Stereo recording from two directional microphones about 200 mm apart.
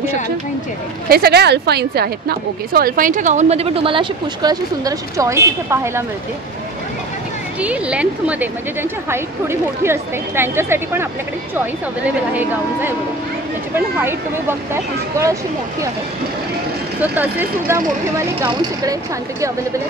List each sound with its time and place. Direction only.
1.0 s a woman's voice: 50° right (ahead or behind); by 6.0 s 15° right (ahead or behind)
7.6 s speech: 5° right (ahead or behind)
14.7 s speech: 15° right (ahead or behind)
17.0 s speech: 10° right (ahead or behind)